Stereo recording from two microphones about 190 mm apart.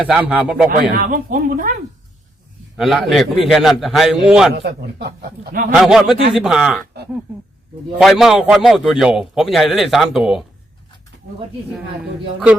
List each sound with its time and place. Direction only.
0.0 s a man's voice: 5° right (ahead or behind)
0.7 s speech: 45° right (ahead or behind)
2.7 s a man's voice: centre (ahead or behind)
4.5 s a man's voice: 60° right (ahead or behind)
5.7 s a man's voice: centre (ahead or behind)
7.9 s a man's voice: centre (ahead or behind)